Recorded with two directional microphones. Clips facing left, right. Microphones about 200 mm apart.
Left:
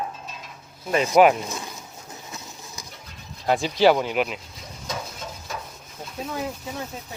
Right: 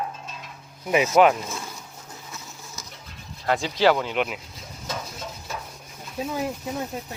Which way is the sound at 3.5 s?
15° left (ahead or behind).